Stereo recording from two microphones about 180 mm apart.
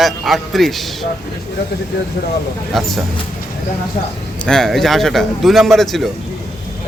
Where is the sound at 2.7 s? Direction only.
Centre (ahead or behind).